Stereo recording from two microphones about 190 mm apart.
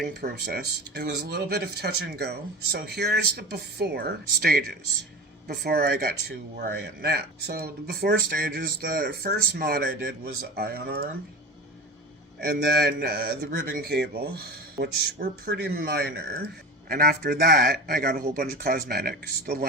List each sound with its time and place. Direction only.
0.0 s speech: 55° right (ahead or behind)
5.6 s speech: 55° right (ahead or behind)
12.4 s speech: 55° right (ahead or behind)